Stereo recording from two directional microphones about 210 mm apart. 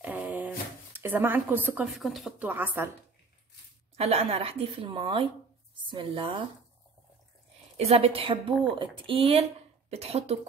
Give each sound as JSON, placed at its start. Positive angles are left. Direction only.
{"t": 0.0, "sound": "speech", "side_deg": -5}
{"t": 3.9, "sound": "a woman's voice", "side_deg": -30}
{"t": 7.7, "sound": "a woman's voice", "side_deg": -30}